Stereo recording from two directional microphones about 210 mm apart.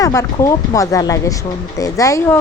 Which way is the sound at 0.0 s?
15° left (ahead or behind).